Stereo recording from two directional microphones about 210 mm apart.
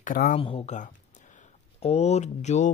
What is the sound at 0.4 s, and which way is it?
Speech, 25° left (ahead or behind).